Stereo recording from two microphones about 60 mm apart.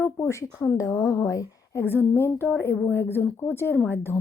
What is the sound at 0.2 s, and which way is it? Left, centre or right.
A woman's voice, left.